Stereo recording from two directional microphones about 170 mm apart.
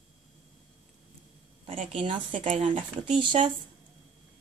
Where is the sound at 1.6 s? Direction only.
35° right (ahead or behind).